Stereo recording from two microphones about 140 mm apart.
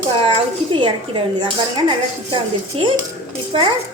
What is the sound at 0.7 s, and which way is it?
Speech, 35° right (ahead or behind).